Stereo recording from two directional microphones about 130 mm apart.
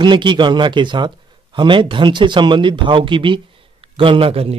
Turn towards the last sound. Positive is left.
turn(degrees=-45)  # may be behind; listen again after turning